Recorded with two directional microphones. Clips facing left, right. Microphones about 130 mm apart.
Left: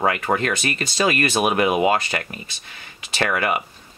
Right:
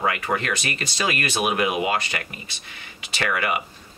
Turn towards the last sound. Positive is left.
turn(degrees=35)  # may be behind; listen again after turning